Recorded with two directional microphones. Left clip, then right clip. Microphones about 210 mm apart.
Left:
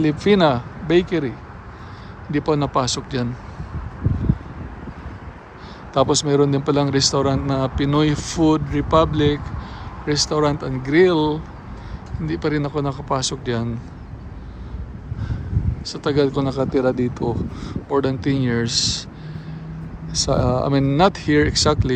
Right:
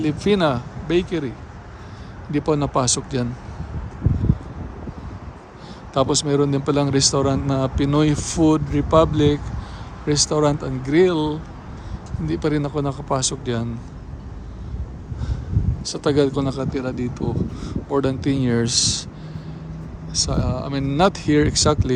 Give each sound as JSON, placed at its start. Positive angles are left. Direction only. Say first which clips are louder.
{"t": 0.0, "sound": "speech", "louder": "left 3 dB", "side_deg": -15}
{"t": 2.3, "sound": "speech", "louder": "left 1 dB", "side_deg": -20}
{"t": 5.9, "sound": "speech", "louder": "left 2 dB", "side_deg": -15}
{"t": 15.8, "sound": "speech", "louder": "even", "side_deg": -25}
{"t": 16.6, "sound": "speech", "louder": "left 7 dB", "side_deg": -5}
{"t": 20.1, "sound": "speech", "louder": "left 4 dB", "side_deg": -10}